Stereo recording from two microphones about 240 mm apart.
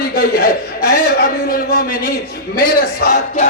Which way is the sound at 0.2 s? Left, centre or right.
Left.